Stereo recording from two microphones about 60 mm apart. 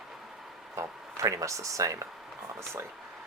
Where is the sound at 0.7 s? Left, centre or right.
Right.